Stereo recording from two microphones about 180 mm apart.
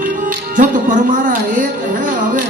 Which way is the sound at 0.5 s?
50° right (ahead or behind).